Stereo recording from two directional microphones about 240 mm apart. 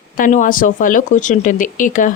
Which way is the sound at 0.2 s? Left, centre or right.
Left.